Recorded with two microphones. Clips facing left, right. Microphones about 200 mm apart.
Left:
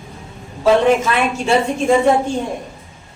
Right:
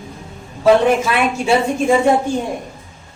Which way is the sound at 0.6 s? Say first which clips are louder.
Right 1 dB; centre (ahead or behind).